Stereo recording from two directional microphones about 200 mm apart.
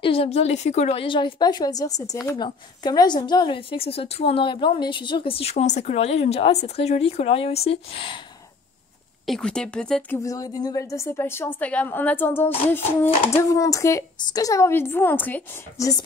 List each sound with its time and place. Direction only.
0.0 s a woman's voice: 30° left (ahead or behind)
9.2 s speech: centre (ahead or behind)